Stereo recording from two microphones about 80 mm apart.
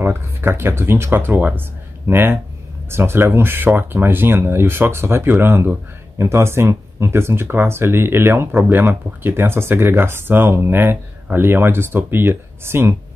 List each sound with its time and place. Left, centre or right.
0.0 s speech: right